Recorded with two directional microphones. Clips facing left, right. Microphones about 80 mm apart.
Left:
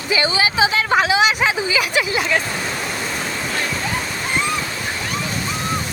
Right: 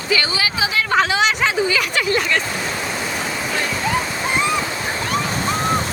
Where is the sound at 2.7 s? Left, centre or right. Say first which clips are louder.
Right 1 dB; centre.